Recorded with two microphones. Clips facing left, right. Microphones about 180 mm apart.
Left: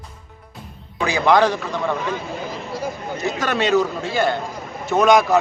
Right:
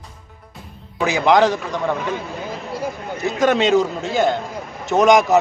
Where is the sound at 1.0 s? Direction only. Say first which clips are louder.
Right 1 dB; 20° right (ahead or behind).